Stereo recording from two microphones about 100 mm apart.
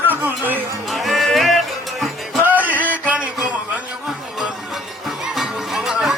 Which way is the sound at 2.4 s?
15° right (ahead or behind).